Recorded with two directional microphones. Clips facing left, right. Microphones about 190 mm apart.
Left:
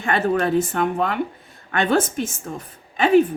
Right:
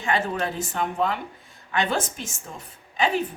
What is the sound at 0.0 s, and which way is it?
Speech, 55° left (ahead or behind).